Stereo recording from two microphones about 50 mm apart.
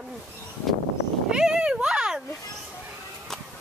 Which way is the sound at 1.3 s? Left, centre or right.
Centre.